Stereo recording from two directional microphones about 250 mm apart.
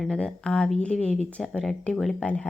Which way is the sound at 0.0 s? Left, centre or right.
Centre.